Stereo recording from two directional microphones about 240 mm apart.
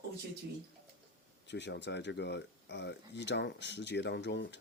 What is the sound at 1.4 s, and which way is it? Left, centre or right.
Speech, left.